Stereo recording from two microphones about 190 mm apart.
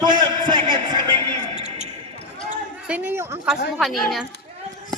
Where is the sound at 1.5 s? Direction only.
35° right (ahead or behind).